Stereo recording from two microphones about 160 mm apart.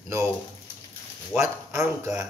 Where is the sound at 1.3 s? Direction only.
15° right (ahead or behind).